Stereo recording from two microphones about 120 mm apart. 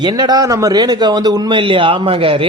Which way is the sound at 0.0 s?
35° right (ahead or behind).